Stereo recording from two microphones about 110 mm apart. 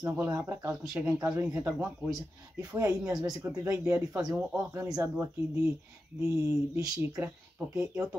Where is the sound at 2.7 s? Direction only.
30° right (ahead or behind).